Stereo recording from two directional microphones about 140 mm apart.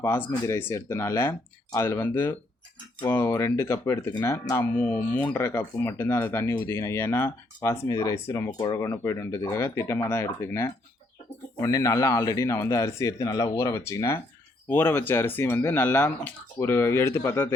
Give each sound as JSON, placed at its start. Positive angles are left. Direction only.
{"t": 0.0, "sound": "speech", "side_deg": 15}